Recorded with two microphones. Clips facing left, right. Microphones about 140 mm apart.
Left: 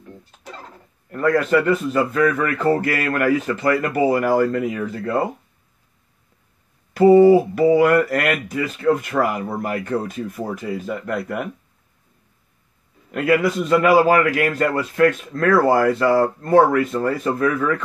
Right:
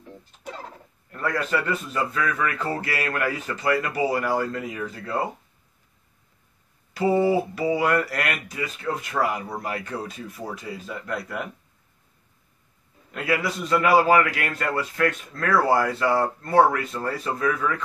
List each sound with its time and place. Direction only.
1.1 s speech: 50° left (ahead or behind)
6.9 s speech: 50° left (ahead or behind)
13.1 s speech: 50° left (ahead or behind)